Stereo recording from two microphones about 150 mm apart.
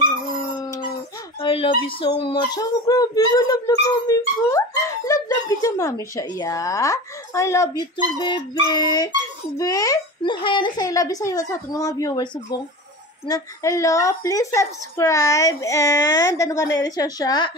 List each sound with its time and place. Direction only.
1.4 s a sound: 40° left (ahead or behind)
1.9 s speech: 35° left (ahead or behind)
13.3 s speech: 20° left (ahead or behind)